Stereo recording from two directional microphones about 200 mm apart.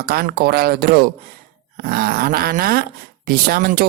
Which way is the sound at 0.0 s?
50° right (ahead or behind).